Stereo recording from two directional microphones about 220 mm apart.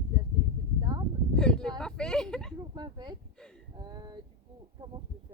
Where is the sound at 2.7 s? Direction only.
20° right (ahead or behind).